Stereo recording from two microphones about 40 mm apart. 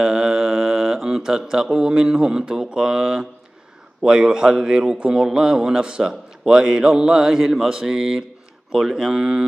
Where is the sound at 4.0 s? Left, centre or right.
Centre.